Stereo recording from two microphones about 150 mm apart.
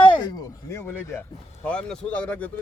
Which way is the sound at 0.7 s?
15° left (ahead or behind).